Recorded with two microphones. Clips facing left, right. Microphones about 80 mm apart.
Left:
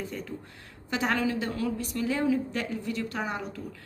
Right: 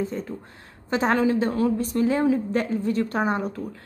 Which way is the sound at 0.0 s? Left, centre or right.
Right.